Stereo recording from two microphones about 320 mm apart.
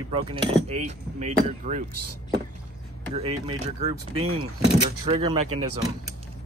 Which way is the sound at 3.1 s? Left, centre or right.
Centre.